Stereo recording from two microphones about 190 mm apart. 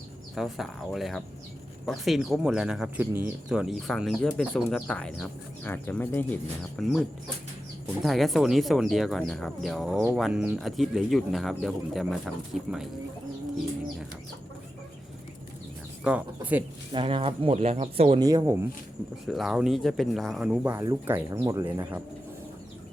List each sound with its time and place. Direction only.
0.3 s speech: centre (ahead or behind)
8.0 s speech: centre (ahead or behind)
16.0 s speech: 10° right (ahead or behind)
16.9 s speech: 25° right (ahead or behind)
18.2 s speech: 20° right (ahead or behind)
19.2 s speech: centre (ahead or behind)